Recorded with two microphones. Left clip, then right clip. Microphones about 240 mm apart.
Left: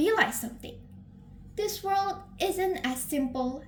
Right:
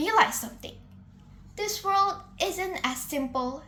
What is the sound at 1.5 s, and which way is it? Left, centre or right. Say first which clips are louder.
A woman's voice: right 3 dB; right.